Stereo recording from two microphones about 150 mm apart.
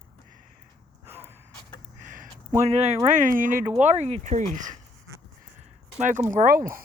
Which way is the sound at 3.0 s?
55° right (ahead or behind).